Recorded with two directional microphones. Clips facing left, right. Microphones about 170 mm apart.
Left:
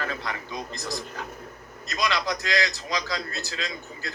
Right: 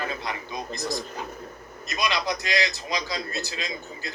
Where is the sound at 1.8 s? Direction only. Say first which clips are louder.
Even; 15° right (ahead or behind).